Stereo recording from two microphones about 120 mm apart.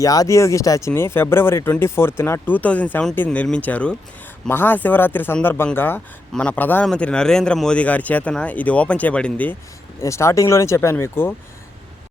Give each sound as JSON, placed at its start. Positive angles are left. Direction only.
{"t": 0.0, "sound": "speech", "side_deg": 30}
{"t": 10.0, "sound": "speech", "side_deg": 25}